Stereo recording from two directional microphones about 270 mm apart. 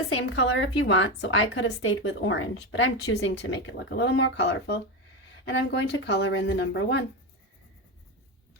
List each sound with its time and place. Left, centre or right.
0.3 s a woman's voice: left